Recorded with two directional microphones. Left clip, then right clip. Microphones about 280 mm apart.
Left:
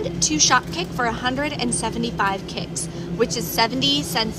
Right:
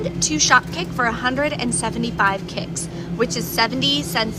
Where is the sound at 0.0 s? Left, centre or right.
Centre.